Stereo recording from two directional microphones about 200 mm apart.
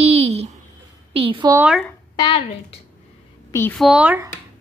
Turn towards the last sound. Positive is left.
turn(degrees=-10)  # may be behind; listen again after turning